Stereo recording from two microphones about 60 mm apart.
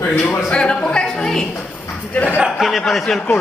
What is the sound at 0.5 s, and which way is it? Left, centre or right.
Speech, centre.